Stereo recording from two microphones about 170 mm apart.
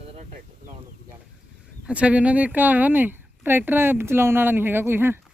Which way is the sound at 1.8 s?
5° right (ahead or behind).